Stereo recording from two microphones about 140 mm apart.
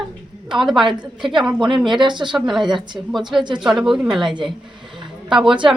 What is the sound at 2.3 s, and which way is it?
Speech, centre (ahead or behind).